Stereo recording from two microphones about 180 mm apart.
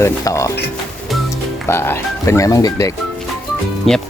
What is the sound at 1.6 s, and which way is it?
Speech, 15° left (ahead or behind).